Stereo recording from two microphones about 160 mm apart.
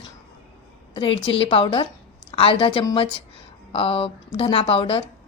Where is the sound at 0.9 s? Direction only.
35° left (ahead or behind).